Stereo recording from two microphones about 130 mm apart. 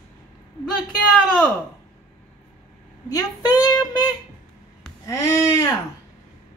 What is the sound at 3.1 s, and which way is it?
Speech, 30° left (ahead or behind).